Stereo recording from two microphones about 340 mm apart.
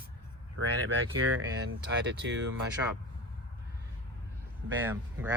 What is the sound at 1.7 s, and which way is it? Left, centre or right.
Speech, right.